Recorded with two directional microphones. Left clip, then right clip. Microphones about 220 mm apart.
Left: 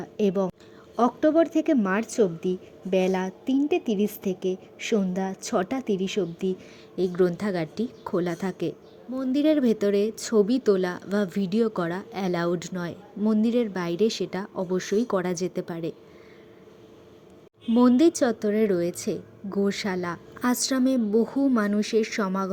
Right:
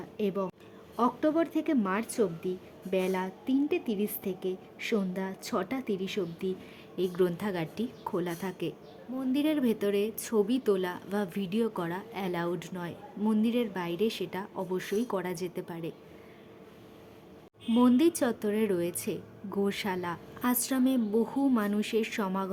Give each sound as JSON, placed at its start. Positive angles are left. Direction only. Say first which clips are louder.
{"t": 0.0, "sound": "a woman's voice", "louder": "left 7 dB", "side_deg": 20}
{"t": 17.7, "sound": "a woman's voice", "louder": "left 5 dB", "side_deg": 20}